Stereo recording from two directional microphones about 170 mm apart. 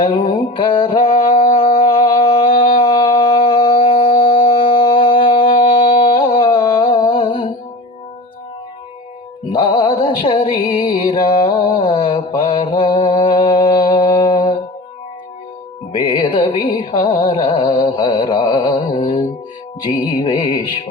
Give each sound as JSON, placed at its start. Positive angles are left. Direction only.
{"t": 0.0, "sound": "music", "side_deg": 30}
{"t": 4.0, "sound": "a sound", "side_deg": 30}
{"t": 9.5, "sound": "music", "side_deg": 30}
{"t": 11.4, "sound": "mantra", "side_deg": 30}
{"t": 15.9, "sound": "music", "side_deg": 30}
{"t": 18.9, "sound": "music", "side_deg": 40}
{"t": 20.1, "sound": "music", "side_deg": 30}